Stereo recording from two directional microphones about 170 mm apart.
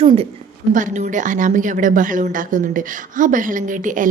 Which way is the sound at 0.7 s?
50° right (ahead or behind).